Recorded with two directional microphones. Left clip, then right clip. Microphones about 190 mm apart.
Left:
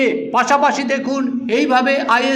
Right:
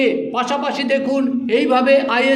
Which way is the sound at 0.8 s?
10° left (ahead or behind).